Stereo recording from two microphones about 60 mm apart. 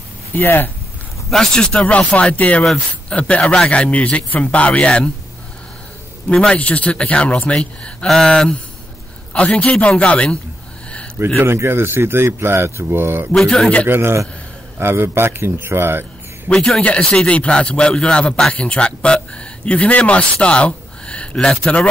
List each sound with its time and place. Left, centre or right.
0.3 s speech: left
1.3 s a man's voice: centre
6.5 s a man's voice: left
11.3 s speech: right
13.3 s speech: centre
13.8 s a man's voice: right
16.4 s speech: centre